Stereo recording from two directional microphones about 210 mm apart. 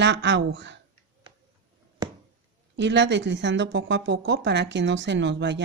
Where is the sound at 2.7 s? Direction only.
55° right (ahead or behind).